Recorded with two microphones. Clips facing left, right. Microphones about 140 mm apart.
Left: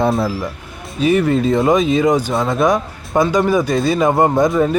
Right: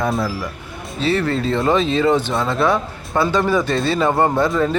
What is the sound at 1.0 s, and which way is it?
Speech, 15° left (ahead or behind).